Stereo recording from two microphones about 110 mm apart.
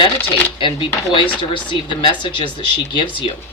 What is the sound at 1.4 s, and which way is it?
Speech, 50° left (ahead or behind).